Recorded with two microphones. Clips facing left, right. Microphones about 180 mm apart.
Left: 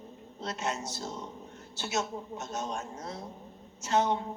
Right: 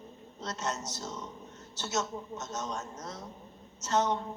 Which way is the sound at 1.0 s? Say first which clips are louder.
Right 1 dB; 30° left (ahead or behind).